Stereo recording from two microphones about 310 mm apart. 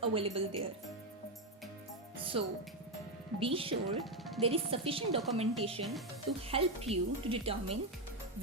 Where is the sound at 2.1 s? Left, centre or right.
Centre.